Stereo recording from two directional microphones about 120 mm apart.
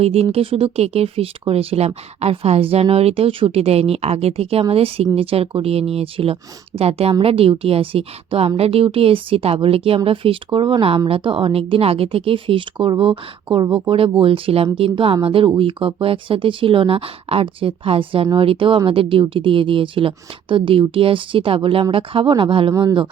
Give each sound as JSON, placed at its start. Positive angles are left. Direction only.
{"t": 0.0, "sound": "speech", "side_deg": -55}
{"t": 22.7, "sound": "speech", "side_deg": -30}